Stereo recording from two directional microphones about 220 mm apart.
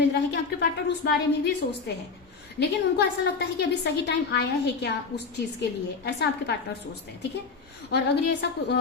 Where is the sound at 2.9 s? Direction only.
50° left (ahead or behind).